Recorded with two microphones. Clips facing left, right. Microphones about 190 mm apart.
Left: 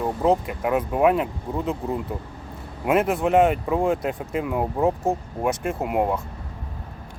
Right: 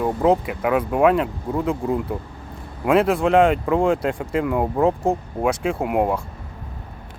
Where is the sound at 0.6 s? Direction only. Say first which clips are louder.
Right 3 dB; 85° right.